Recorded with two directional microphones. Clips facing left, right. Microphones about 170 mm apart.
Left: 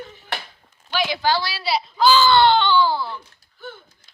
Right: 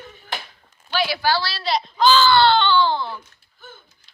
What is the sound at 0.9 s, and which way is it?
Speech, 15° left (ahead or behind).